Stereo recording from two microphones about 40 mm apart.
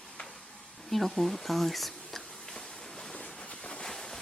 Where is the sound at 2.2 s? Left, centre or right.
Centre.